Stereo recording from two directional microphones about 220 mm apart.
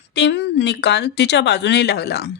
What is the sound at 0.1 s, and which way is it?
Speech, 50° left (ahead or behind).